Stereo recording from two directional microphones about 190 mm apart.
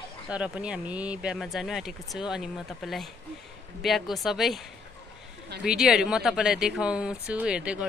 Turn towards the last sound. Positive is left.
turn(degrees=-5)  # may be behind; listen again after turning